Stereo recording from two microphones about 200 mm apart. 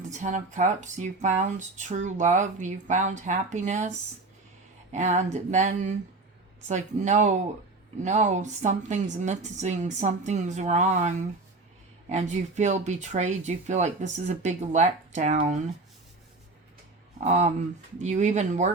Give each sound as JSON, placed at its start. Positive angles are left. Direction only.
{"t": 0.1, "sound": "speech", "side_deg": -35}
{"t": 17.2, "sound": "speech", "side_deg": -35}